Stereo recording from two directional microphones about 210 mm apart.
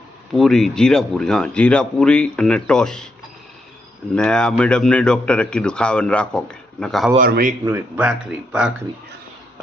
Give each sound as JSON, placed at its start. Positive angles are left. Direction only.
{"t": 0.3, "sound": "speech", "side_deg": 0}
{"t": 4.1, "sound": "speech", "side_deg": 5}
{"t": 7.2, "sound": "speech", "side_deg": -45}
{"t": 7.6, "sound": "speech", "side_deg": -10}